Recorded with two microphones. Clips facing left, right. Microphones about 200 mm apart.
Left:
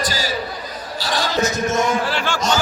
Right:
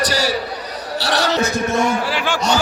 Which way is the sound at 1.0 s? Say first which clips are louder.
Right 4 dB; 70° right (ahead or behind).